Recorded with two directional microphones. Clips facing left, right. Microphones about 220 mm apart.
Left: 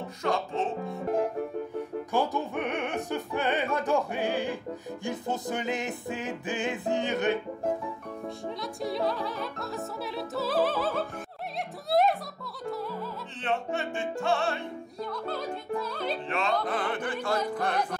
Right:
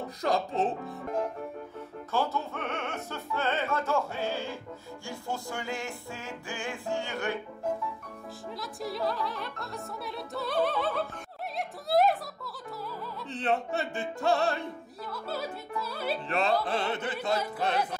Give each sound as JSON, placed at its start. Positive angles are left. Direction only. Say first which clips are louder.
{"t": 0.2, "sound": "music", "louder": "right 1 dB", "side_deg": -35}
{"t": 2.1, "sound": "music", "louder": "left 2 dB", "side_deg": 15}
{"t": 8.8, "sound": "opera", "louder": "left 2 dB", "side_deg": 0}
{"t": 13.4, "sound": "music", "louder": "right 1 dB", "side_deg": -35}
{"t": 15.2, "sound": "music", "louder": "even", "side_deg": -5}
{"t": 16.3, "sound": "music", "louder": "right 3 dB", "side_deg": -35}
{"t": 16.6, "sound": "chant", "louder": "left 1 dB", "side_deg": -25}